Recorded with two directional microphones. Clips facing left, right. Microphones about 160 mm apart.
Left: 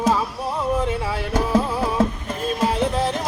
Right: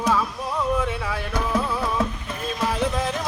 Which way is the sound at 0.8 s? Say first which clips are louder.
Left 3 dB; 30° left (ahead or behind).